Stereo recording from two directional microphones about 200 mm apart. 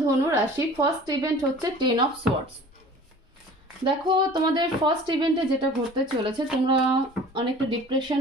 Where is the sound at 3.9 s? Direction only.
25° right (ahead or behind).